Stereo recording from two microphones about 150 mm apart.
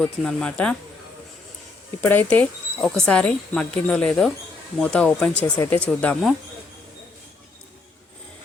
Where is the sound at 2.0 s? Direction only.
10° left (ahead or behind).